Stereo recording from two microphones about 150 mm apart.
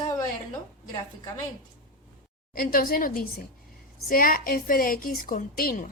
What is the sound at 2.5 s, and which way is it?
A woman's voice, 75° left (ahead or behind).